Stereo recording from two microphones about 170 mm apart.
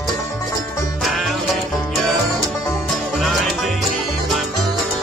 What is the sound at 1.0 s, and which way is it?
Music, centre (ahead or behind).